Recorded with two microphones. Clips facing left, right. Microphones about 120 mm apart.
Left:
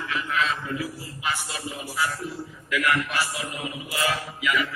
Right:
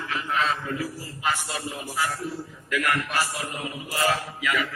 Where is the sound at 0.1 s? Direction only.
35° right (ahead or behind).